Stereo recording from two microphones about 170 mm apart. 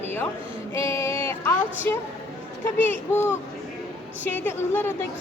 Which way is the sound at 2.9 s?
15° left (ahead or behind).